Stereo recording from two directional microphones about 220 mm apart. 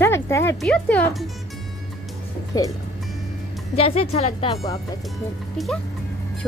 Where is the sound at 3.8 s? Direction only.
25° left (ahead or behind).